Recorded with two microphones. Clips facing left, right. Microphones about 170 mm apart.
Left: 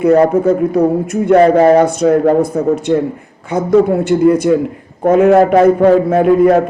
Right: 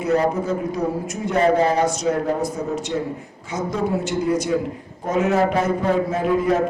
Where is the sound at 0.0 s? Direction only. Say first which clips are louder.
Left 10 dB; 60° left (ahead or behind).